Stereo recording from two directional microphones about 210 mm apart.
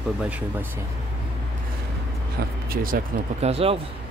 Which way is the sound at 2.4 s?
45° right (ahead or behind).